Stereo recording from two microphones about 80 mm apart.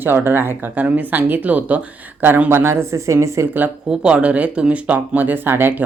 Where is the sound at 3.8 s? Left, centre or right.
Centre.